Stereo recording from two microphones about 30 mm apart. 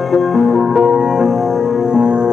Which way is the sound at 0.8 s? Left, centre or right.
Right.